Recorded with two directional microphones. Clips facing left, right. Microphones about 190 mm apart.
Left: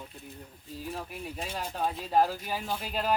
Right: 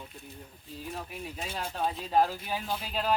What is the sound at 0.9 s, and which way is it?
Speech, centre (ahead or behind).